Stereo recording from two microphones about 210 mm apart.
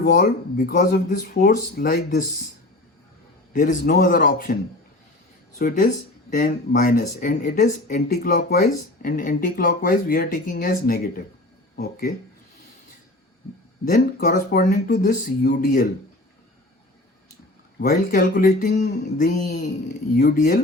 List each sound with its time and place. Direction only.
0.0 s speech: 45° left (ahead or behind)
3.5 s speech: 40° left (ahead or behind)
5.5 s speech: 45° left (ahead or behind)
13.8 s speech: 40° left (ahead or behind)
17.7 s speech: 40° left (ahead or behind)